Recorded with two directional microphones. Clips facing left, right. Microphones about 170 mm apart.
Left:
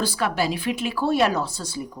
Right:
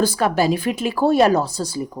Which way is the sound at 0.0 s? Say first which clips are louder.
Right 6 dB; 45° right (ahead or behind).